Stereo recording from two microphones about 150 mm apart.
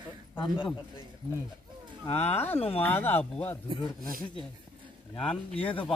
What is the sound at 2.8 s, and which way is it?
Speech, 10° left (ahead or behind).